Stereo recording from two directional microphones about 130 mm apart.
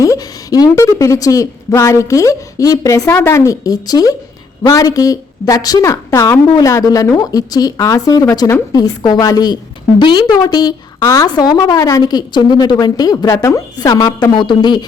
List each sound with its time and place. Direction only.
0.0 s a woman's voice: 25° left (ahead or behind)